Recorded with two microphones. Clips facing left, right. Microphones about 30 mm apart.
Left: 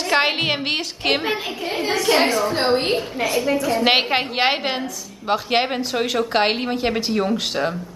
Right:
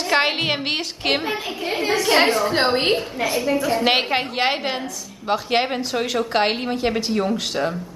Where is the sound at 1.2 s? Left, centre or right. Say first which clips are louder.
Left 2 dB; centre.